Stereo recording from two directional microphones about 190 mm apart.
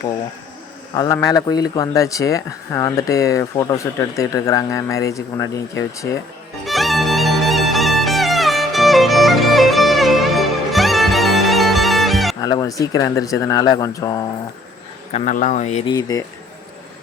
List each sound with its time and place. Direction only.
0.9 s speech: 20° left (ahead or behind)
6.7 s music: centre (ahead or behind)
12.4 s speech: 20° left (ahead or behind)
15.1 s speech: 40° left (ahead or behind)
15.9 s speech: 20° left (ahead or behind)